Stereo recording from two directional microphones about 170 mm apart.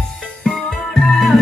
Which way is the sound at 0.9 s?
Centre (ahead or behind).